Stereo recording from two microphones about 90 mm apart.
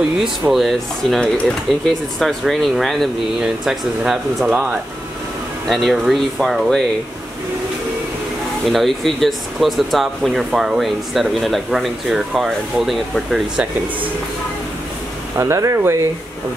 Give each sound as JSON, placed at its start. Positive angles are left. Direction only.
{"t": 0.2, "sound": "speech", "side_deg": 0}
{"t": 5.7, "sound": "speech", "side_deg": 0}
{"t": 8.6, "sound": "speech", "side_deg": 0}
{"t": 15.3, "sound": "speech", "side_deg": -35}